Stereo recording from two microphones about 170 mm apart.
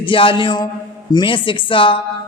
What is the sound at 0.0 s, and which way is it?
A man's voice, 30° left (ahead or behind).